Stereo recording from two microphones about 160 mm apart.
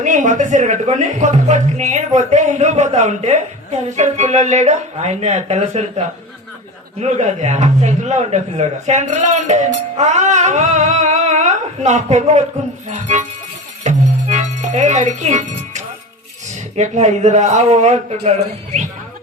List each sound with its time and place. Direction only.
0.0 s speech: 50° right (ahead or behind)
7.0 s speech: 45° right (ahead or behind)
13.8 s music: 45° right (ahead or behind)
16.5 s speech: 45° right (ahead or behind)